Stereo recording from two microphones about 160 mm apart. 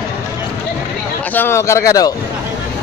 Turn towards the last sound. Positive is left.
turn(degrees=20)  # may be behind; listen again after turning